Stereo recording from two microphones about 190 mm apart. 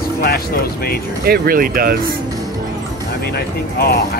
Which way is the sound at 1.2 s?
55° right (ahead or behind).